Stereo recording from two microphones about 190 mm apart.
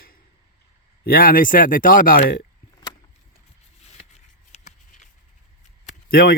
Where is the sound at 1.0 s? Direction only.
50° left (ahead or behind).